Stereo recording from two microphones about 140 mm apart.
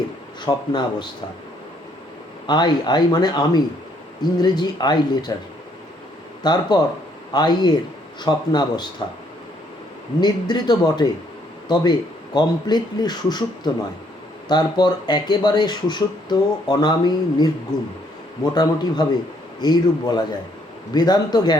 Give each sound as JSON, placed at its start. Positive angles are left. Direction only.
{"t": 0.4, "sound": "a man's voice", "side_deg": 30}
{"t": 2.5, "sound": "speech", "side_deg": 30}
{"t": 6.4, "sound": "a man's voice", "side_deg": 30}
{"t": 10.2, "sound": "a man's voice", "side_deg": 30}
{"t": 18.5, "sound": "speech", "side_deg": 30}